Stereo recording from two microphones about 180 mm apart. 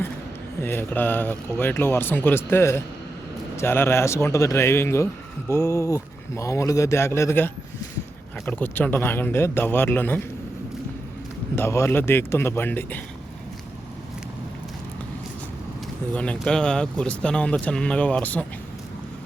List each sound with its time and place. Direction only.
0.6 s speech: 10° left (ahead or behind)
11.5 s speech: 15° left (ahead or behind)
16.1 s speech: 5° left (ahead or behind)